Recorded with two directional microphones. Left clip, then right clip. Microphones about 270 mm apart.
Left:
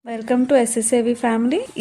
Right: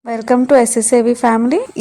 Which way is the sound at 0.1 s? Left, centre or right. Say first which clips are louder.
Right 6 dB; centre.